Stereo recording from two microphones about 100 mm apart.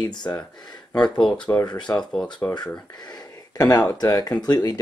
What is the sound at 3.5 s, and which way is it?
Speech, 40° left (ahead or behind).